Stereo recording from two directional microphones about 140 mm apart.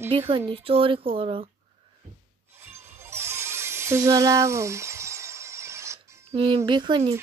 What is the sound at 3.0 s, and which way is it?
Music, 20° right (ahead or behind).